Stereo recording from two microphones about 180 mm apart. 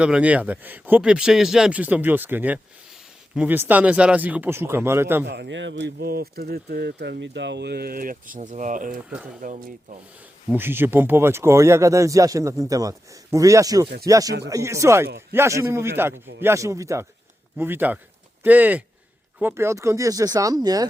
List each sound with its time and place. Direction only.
0.0 s speech: 5° right (ahead or behind)
5.2 s speech: 70° right (ahead or behind); by 9.0 s 45° right (ahead or behind)
9.0 s speech: 5° right (ahead or behind)
9.4 s speech: 50° right (ahead or behind)
10.5 s speech: 10° right (ahead or behind)